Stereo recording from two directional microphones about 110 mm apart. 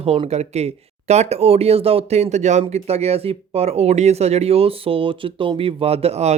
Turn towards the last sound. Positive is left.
turn(degrees=-80)